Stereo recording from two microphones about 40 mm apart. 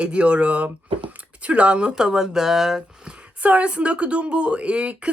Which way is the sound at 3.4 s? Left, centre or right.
Right.